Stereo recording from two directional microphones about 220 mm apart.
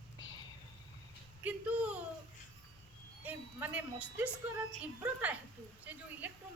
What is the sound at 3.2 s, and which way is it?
A woman's voice, 5° right (ahead or behind).